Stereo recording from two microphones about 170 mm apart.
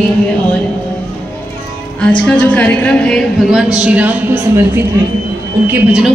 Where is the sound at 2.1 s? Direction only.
10° left (ahead or behind).